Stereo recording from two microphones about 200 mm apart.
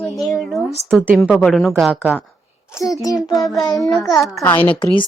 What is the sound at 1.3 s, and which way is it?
Speech, centre (ahead or behind).